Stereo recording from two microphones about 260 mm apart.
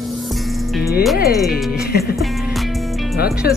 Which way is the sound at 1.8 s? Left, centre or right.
Left.